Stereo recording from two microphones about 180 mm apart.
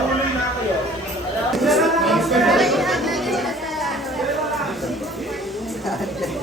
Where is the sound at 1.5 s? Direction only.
Centre (ahead or behind).